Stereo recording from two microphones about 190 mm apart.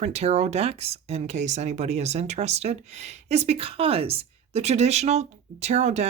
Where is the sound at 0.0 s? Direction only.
35° right (ahead or behind).